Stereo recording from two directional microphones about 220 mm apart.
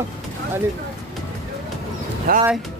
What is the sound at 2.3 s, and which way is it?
Speech, 40° right (ahead or behind).